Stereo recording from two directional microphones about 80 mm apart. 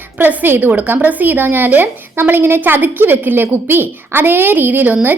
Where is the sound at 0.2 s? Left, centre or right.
Right.